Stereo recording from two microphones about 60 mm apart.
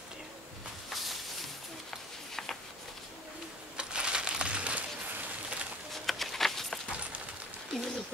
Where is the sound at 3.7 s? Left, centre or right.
Centre.